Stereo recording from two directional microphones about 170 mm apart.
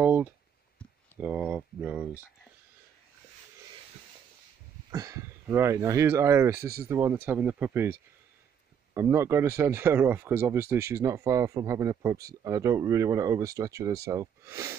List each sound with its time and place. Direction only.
0.0 s clicking: 10° right (ahead or behind)
1.2 s speech: 10° right (ahead or behind)
4.9 s speech: 20° right (ahead or behind)